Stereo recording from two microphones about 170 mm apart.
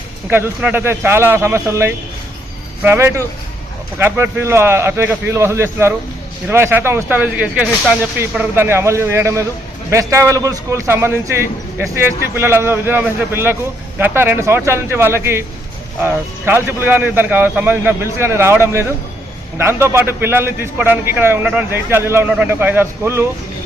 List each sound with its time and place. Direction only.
0.3 s a man's voice: 10° right (ahead or behind)